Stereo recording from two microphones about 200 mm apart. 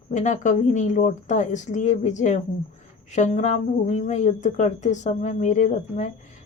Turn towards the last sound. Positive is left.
turn(degrees=35)  # may be behind; listen again after turning